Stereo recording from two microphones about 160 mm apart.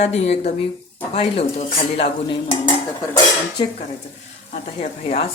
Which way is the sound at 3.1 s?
20° left (ahead or behind).